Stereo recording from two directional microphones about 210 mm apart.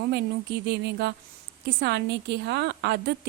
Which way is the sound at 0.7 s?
55° right (ahead or behind).